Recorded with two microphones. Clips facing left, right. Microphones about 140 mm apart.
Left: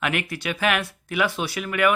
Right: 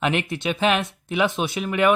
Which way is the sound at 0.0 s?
25° right (ahead or behind).